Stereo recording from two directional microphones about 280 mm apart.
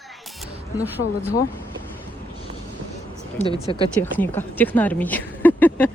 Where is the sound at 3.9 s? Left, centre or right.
Centre.